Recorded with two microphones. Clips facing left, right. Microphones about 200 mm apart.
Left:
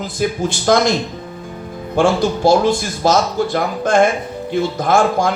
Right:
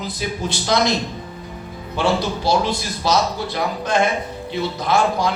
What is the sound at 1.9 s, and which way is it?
A man's voice, 50° left (ahead or behind).